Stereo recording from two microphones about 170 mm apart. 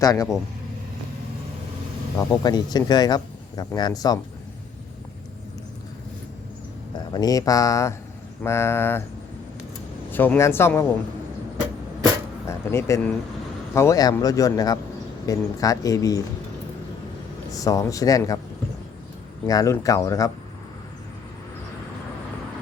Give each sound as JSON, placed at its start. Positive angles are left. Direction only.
{"t": 0.0, "sound": "speech", "side_deg": 20}
{"t": 2.1, "sound": "speech", "side_deg": 20}
{"t": 7.1, "sound": "speech", "side_deg": 20}
{"t": 10.1, "sound": "speech", "side_deg": 10}
{"t": 12.5, "sound": "speech", "side_deg": 15}
{"t": 17.5, "sound": "speech", "side_deg": 20}
{"t": 19.5, "sound": "speech", "side_deg": 20}